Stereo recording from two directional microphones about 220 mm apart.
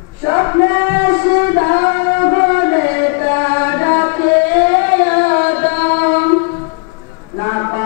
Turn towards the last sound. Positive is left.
turn(degrees=20)  # may be behind; listen again after turning